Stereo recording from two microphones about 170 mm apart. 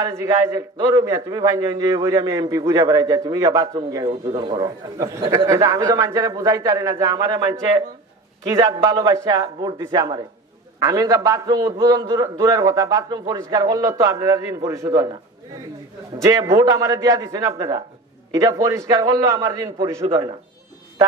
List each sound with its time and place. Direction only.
0.0 s a man's voice: 20° right (ahead or behind)
16.3 s a man's voice: 20° right (ahead or behind)